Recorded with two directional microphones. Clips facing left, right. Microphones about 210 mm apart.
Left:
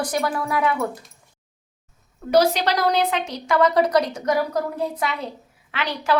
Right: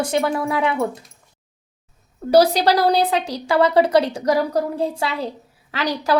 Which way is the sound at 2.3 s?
35° right (ahead or behind).